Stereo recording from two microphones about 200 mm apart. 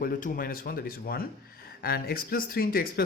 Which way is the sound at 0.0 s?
45° left (ahead or behind).